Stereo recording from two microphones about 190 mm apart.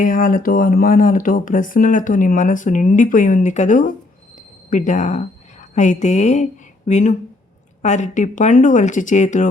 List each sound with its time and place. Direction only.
0.0 s a woman's voice: 45° left (ahead or behind)